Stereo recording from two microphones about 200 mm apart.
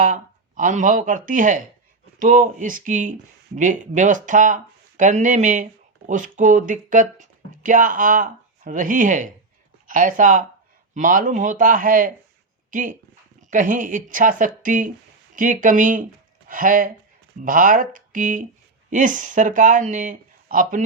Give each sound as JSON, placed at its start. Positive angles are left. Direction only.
{"t": 0.0, "sound": "speech", "side_deg": -40}